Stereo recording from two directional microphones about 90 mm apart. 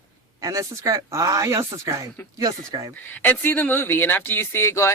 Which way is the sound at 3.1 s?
20° left (ahead or behind).